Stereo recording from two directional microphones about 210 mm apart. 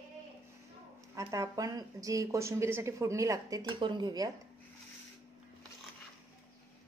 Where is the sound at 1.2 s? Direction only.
15° right (ahead or behind).